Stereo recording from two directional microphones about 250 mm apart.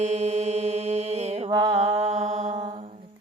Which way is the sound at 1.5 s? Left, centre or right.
Centre.